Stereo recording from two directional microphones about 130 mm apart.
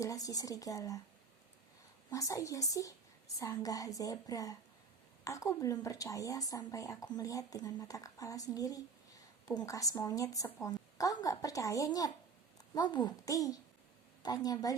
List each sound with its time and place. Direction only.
0.0 s a woman's voice: 25° left (ahead or behind)
2.0 s a woman's voice: 25° left (ahead or behind)